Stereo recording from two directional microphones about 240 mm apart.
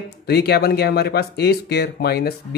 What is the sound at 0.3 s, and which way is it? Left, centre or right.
Speech, left.